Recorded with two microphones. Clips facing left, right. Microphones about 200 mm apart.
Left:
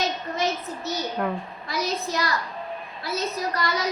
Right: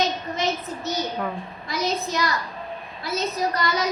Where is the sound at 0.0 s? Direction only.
20° right (ahead or behind).